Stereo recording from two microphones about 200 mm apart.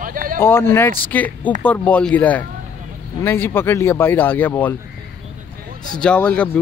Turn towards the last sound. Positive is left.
turn(degrees=5)  # may be behind; listen again after turning